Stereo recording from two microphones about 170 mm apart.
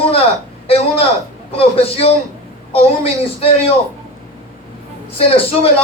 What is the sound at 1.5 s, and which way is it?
A man's voice, 35° left (ahead or behind).